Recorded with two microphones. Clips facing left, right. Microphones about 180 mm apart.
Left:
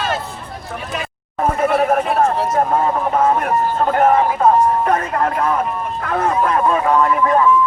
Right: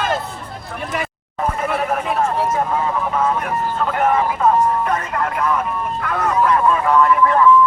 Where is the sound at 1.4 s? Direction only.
50° left (ahead or behind).